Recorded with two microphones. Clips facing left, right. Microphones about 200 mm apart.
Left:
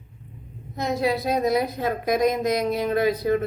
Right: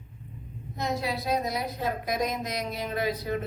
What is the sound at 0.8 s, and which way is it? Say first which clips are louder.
A woman's voice: left 7 dB; 55° left (ahead or behind).